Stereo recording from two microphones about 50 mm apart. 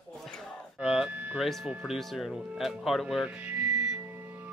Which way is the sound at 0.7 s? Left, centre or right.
Centre.